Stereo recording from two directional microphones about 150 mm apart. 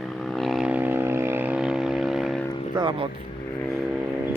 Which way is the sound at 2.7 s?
30° right (ahead or behind).